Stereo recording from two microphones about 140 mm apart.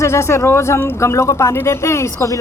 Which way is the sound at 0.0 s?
20° left (ahead or behind).